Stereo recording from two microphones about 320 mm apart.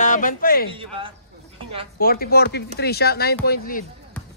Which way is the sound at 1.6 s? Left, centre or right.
Centre.